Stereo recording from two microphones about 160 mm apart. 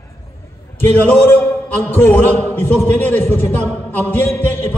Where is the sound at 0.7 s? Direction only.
10° left (ahead or behind).